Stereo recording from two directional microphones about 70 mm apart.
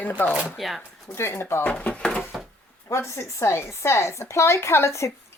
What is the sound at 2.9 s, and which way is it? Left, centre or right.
A woman's voice, left.